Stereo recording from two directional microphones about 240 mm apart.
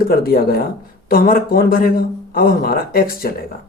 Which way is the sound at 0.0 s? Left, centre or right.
Left.